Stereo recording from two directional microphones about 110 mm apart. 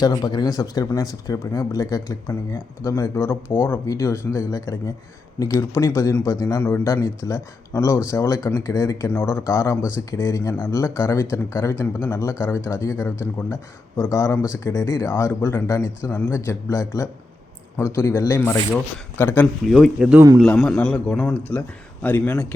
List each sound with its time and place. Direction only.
0.0 s speech: 40° left (ahead or behind)
6.6 s a man's voice: 15° left (ahead or behind)
6.8 s speech: 25° left (ahead or behind)
20.0 s speech: 10° right (ahead or behind)
20.4 s a man's voice: 5° left (ahead or behind)